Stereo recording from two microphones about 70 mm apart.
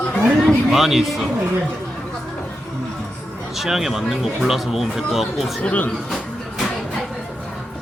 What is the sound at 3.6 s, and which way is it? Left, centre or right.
Speech, centre.